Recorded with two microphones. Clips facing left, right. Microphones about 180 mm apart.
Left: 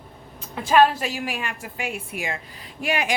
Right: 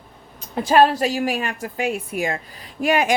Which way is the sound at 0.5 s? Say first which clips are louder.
Right 2 dB; 40° right (ahead or behind).